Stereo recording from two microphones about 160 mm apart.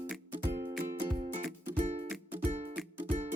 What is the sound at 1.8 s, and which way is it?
Music, 45° right (ahead or behind).